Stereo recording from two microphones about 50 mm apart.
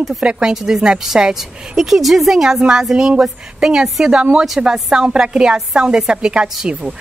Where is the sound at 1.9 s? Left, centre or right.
Centre.